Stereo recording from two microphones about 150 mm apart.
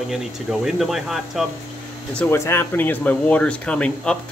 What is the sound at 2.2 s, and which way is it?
Speech, 15° left (ahead or behind).